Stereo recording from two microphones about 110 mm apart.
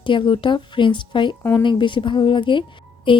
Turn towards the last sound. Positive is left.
turn(degrees=50)  # may be behind; listen again after turning